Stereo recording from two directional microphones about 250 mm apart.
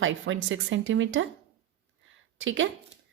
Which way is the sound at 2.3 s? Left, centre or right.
Right.